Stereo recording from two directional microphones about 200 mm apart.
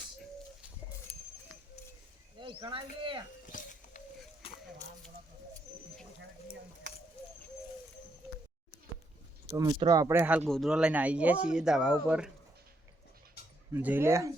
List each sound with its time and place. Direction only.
2.4 s speech: 25° right (ahead or behind)
3.4 s a sound: 40° left (ahead or behind)
4.4 s a sound: 30° left (ahead or behind)
9.5 s speech: 15° right (ahead or behind)
10.4 s speech: centre (ahead or behind)
13.7 s speech: 10° right (ahead or behind)